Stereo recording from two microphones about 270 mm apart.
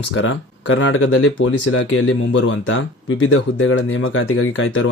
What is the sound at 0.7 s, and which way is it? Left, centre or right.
Speech, left.